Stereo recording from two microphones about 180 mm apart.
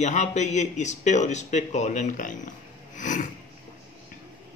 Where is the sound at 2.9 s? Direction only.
45° left (ahead or behind).